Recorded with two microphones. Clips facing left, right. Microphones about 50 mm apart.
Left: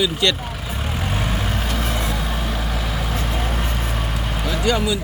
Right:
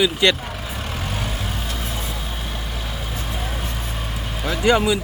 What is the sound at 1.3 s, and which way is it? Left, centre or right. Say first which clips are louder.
Vehicle: left 4 dB; left.